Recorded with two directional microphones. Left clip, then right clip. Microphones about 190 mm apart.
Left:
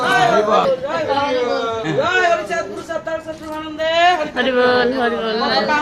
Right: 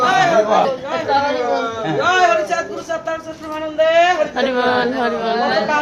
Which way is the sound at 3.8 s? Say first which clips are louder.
Right 2 dB; 20° right (ahead or behind).